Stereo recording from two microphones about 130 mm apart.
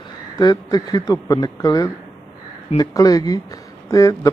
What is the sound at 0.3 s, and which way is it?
A man's voice, 30° left (ahead or behind).